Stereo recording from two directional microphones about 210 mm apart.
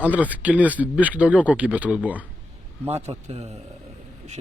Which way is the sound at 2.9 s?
30° right (ahead or behind).